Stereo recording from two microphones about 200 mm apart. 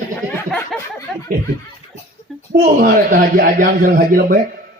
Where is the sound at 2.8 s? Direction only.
45° right (ahead or behind).